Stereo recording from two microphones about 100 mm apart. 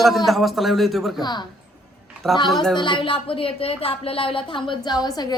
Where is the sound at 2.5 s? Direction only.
5° left (ahead or behind).